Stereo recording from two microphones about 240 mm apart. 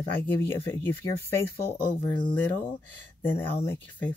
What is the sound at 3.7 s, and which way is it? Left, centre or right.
Speech, centre.